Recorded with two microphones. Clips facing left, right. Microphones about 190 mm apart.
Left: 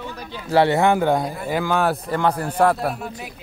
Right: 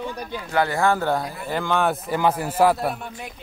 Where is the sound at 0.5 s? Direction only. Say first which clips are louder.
Left 5 dB; 25° left (ahead or behind); by 3.1 s centre (ahead or behind).